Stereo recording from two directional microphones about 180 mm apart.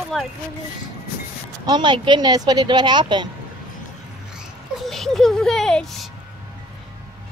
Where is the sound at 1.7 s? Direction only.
25° right (ahead or behind).